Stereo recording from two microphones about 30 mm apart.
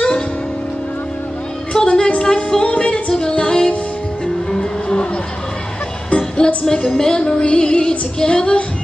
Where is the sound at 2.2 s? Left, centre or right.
Left.